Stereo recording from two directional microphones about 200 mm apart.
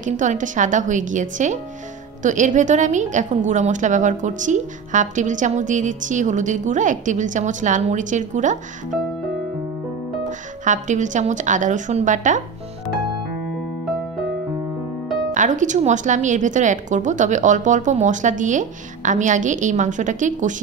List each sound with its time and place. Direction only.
0.0 s a woman's voice: 40° right (ahead or behind)
10.6 s a woman's voice: 40° right (ahead or behind)
15.3 s a woman's voice: 40° right (ahead or behind)